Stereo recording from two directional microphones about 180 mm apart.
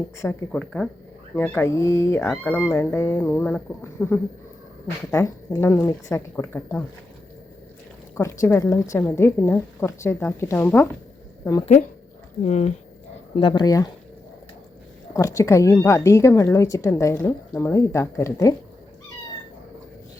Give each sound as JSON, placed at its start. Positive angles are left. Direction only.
{"t": 0.2, "sound": "speech", "side_deg": 15}
{"t": 0.5, "sound": "speech", "side_deg": 5}
{"t": 8.1, "sound": "speech", "side_deg": 15}
{"t": 11.6, "sound": "speech", "side_deg": 40}
{"t": 13.5, "sound": "speech", "side_deg": 20}
{"t": 15.1, "sound": "speech", "side_deg": 15}